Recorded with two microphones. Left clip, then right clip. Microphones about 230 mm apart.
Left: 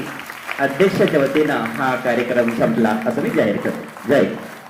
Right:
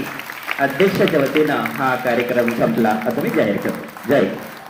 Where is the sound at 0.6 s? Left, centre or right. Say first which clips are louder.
Even; left.